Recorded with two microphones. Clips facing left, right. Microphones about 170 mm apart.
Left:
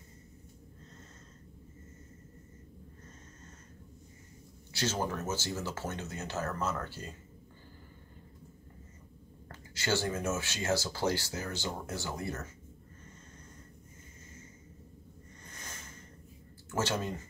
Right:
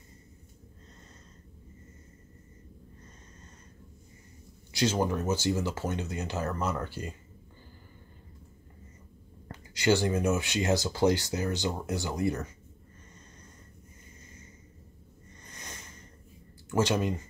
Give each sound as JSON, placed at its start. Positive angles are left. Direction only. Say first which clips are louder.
{"t": 5.0, "sound": "speech", "louder": "right 7 dB", "side_deg": -15}
{"t": 9.5, "sound": "speech", "louder": "right 7 dB", "side_deg": -15}
{"t": 15.4, "sound": "a sound", "louder": "right 2 dB", "side_deg": -20}
{"t": 16.7, "sound": "speech", "louder": "right 6 dB", "side_deg": -15}